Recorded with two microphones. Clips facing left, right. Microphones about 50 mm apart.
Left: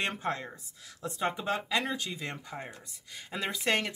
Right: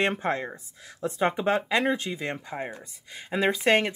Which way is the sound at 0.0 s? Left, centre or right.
Right.